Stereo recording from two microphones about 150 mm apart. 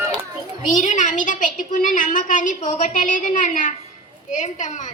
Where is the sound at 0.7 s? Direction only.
55° left (ahead or behind).